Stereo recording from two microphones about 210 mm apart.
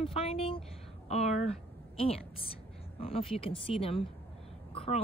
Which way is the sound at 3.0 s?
25° left (ahead or behind).